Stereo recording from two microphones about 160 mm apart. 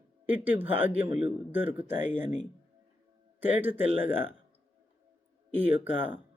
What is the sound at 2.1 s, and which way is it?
Speech, 50° left (ahead or behind).